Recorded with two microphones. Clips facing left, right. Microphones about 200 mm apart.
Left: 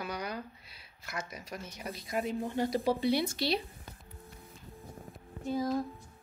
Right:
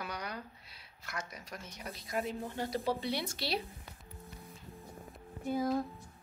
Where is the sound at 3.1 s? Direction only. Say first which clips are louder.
Left 7 dB; centre (ahead or behind).